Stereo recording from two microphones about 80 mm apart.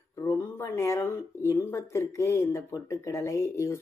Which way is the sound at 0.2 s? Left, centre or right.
Left.